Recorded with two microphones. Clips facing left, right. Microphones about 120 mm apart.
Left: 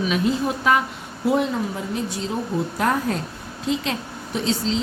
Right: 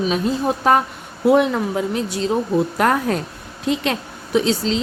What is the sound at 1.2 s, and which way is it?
A woman's voice, 65° right (ahead or behind).